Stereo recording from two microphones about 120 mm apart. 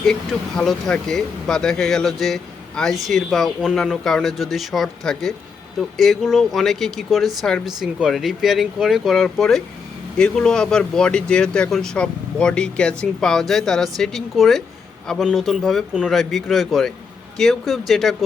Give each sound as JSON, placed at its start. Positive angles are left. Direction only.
{"t": 0.0, "sound": "speech", "side_deg": 5}